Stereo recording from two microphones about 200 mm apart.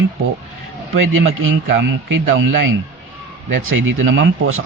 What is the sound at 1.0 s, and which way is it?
Speech, 90° right.